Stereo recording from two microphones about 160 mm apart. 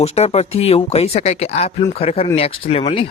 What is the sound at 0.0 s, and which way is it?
Speech, 40° left (ahead or behind).